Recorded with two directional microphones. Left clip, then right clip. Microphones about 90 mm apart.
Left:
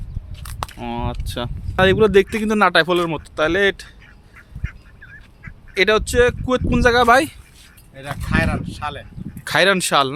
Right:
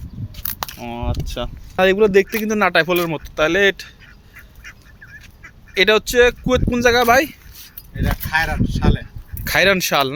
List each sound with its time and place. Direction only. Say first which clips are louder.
0.8 s speech: left 1 dB; 45° left (ahead or behind)
1.7 s speech: even; 25° left (ahead or behind)
2.0 s speech: even; 45° left (ahead or behind)
2.6 s speech: left 1 dB; 25° left (ahead or behind)
3.2 s speech: right 2 dB; centre (ahead or behind)
5.7 s speech: right 2 dB; 5° right (ahead or behind)
6.7 s speech: left 1 dB; 25° left (ahead or behind); by 7.3 s 40° left (ahead or behind)
7.9 s speech: right 3 dB; 20° left (ahead or behind)